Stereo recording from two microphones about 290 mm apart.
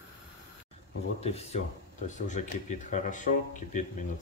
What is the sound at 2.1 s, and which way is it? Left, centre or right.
Speech, left.